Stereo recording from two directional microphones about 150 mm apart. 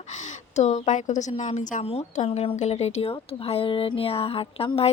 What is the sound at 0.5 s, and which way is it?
A woman's voice, 50° left (ahead or behind).